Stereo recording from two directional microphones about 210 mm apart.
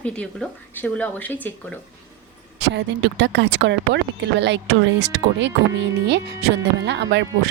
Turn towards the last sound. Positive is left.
turn(degrees=-55)  # may be behind; listen again after turning